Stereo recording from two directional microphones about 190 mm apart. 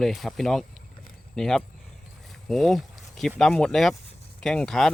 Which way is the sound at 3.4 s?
5° left (ahead or behind).